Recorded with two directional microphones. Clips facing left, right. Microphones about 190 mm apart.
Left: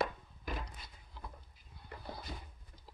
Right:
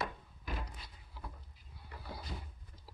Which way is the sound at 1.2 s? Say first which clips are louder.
Right 1 dB; 5° right (ahead or behind).